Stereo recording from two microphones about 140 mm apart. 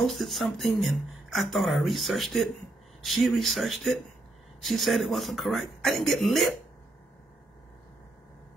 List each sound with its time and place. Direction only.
0.0 s speech: centre (ahead or behind)